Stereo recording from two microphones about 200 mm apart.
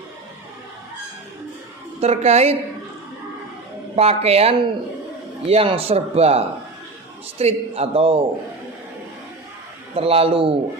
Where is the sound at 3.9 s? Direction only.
30° right (ahead or behind).